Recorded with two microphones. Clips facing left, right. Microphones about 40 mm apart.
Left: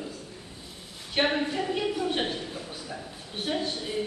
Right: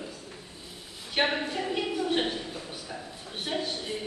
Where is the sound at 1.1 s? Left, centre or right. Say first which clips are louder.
Left 2 dB; centre.